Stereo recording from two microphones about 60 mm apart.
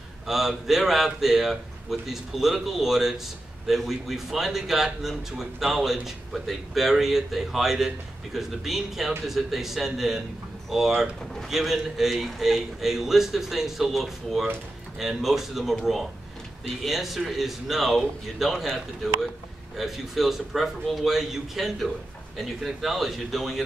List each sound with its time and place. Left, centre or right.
0.3 s a man's voice: centre
19.8 s a man's voice: centre